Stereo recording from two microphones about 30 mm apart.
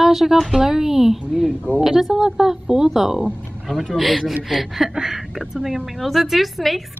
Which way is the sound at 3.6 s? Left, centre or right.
Centre.